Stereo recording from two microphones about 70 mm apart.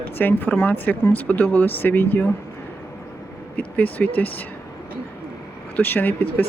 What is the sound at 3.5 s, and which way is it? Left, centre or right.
Speech, left.